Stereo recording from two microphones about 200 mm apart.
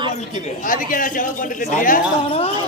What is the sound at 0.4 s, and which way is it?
Speech, 45° left (ahead or behind).